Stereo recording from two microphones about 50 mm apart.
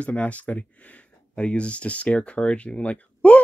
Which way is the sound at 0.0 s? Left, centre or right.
Left.